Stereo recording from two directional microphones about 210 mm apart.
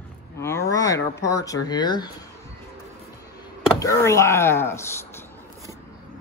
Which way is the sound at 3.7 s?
15° left (ahead or behind).